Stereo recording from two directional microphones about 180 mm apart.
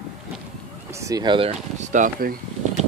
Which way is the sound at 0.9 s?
20° right (ahead or behind).